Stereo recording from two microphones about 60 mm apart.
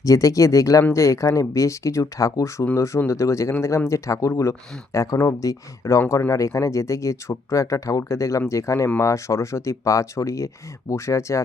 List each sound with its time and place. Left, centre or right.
0.0 s speech: left